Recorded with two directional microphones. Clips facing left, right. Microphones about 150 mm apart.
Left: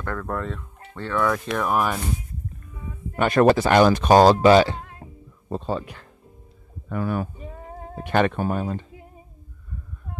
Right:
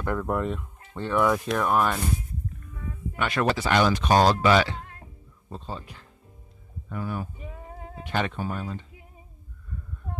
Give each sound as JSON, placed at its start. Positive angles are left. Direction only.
{"t": 0.0, "sound": "fowl", "side_deg": -15}
{"t": 1.5, "sound": "speech", "side_deg": 5}
{"t": 3.2, "sound": "speech", "side_deg": 45}
{"t": 5.5, "sound": "speech", "side_deg": 70}
{"t": 8.0, "sound": "speech", "side_deg": 55}